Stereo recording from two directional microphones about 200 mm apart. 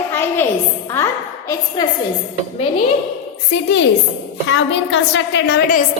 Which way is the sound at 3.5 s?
65° left (ahead or behind).